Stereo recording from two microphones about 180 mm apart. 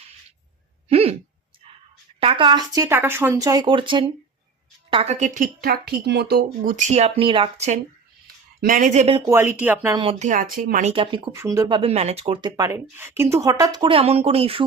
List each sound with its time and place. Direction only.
0.9 s a sound: 35° right (ahead or behind)
2.2 s a woman's voice: 30° right (ahead or behind)
5.2 s speech: 45° right (ahead or behind)
8.6 s speech: 50° right (ahead or behind)
9.2 s speech: 15° right (ahead or behind)
9.9 s speech: 30° right (ahead or behind); by 10.9 s 45° right (ahead or behind)
10.9 s speech: 25° right (ahead or behind)
11.8 s speech: 35° right (ahead or behind)